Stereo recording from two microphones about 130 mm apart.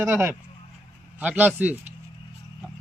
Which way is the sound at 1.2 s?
10° right (ahead or behind).